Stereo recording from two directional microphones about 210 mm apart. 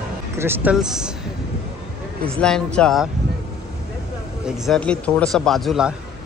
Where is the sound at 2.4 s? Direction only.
5° left (ahead or behind).